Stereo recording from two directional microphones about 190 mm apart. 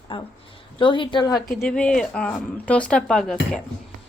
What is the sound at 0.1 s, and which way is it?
A woman's voice, 25° left (ahead or behind).